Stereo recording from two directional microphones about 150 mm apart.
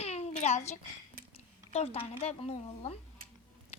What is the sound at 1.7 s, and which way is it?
A woman's voice, 45° left (ahead or behind).